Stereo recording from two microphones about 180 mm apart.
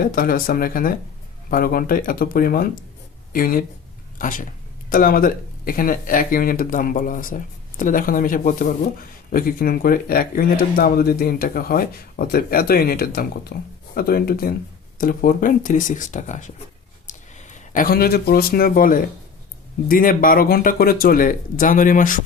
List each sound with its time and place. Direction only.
0.1 s speech: 50° left (ahead or behind)